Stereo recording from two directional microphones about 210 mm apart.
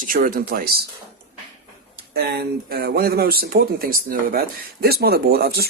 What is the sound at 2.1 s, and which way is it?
Speech, 50° right (ahead or behind).